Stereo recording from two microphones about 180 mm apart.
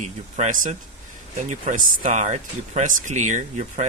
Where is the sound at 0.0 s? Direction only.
40° right (ahead or behind).